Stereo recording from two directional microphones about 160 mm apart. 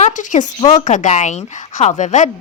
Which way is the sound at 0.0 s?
50° left (ahead or behind).